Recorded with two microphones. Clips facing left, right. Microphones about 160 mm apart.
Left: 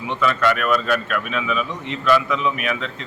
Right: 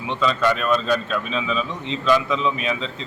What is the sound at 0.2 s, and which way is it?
Speech, 20° right (ahead or behind).